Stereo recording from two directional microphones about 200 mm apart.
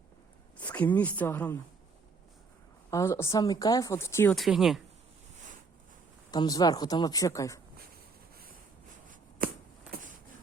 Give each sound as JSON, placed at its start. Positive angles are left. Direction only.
{"t": 0.6, "sound": "speech", "side_deg": 5}
{"t": 2.9, "sound": "speech", "side_deg": 15}
{"t": 4.4, "sound": "speech", "side_deg": 0}
{"t": 6.3, "sound": "speech", "side_deg": 20}
{"t": 9.4, "sound": "a sound", "side_deg": -45}